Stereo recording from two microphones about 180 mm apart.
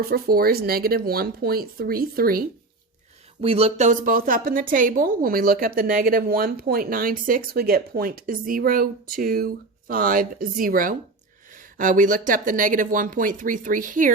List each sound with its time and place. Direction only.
0.0 s speech: 55° right (ahead or behind)
3.4 s a woman's voice: 35° right (ahead or behind)